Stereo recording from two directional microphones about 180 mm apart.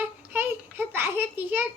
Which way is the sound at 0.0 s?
10° right (ahead or behind).